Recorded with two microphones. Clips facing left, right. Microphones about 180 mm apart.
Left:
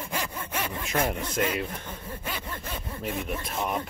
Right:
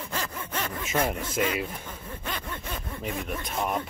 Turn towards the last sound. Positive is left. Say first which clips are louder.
# even
turn(degrees=0)  # may be behind; listen again after turning